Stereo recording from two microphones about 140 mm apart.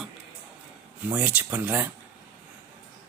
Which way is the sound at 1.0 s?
10° right (ahead or behind).